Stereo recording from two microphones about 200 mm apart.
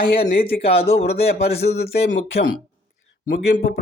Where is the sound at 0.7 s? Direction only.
30° left (ahead or behind).